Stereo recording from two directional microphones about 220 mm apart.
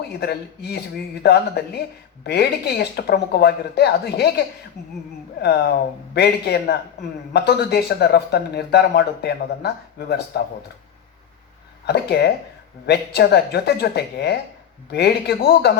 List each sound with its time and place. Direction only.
0.2 s speech: 45° left (ahead or behind)
5.4 s speech: 50° left (ahead or behind)
11.9 s speech: 45° left (ahead or behind)